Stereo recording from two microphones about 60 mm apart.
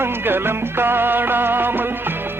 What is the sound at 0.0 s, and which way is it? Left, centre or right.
Music, right.